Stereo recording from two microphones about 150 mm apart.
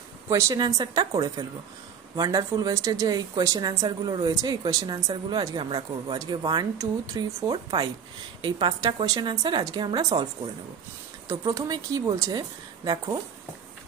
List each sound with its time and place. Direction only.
0.3 s speech: 20° right (ahead or behind)
11.2 s speech: 20° right (ahead or behind)